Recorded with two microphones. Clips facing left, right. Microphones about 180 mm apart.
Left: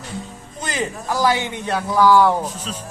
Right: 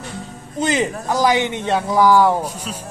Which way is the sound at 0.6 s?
20° right (ahead or behind).